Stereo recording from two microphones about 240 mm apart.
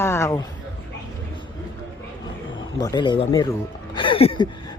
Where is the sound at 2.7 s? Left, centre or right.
Centre.